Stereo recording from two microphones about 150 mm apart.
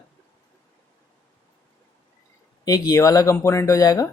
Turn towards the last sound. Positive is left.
turn(degrees=25)  # may be behind; listen again after turning